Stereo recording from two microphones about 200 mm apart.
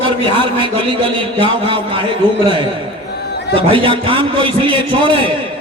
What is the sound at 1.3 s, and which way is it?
Speech, 25° right (ahead or behind).